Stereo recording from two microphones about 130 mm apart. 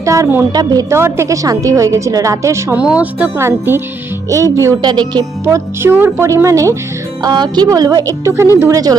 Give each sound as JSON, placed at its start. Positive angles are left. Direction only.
{"t": 0.0, "sound": "a woman's voice", "side_deg": -25}
{"t": 0.5, "sound": "a woman's voice", "side_deg": -30}
{"t": 2.7, "sound": "a woman's voice", "side_deg": -10}
{"t": 4.8, "sound": "a woman's voice", "side_deg": -35}